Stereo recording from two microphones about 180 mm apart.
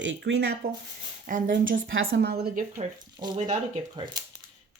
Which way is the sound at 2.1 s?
70° right (ahead or behind).